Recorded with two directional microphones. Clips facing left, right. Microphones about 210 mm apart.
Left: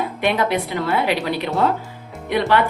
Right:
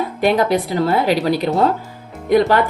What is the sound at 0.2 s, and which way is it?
A woman's voice, 35° right (ahead or behind).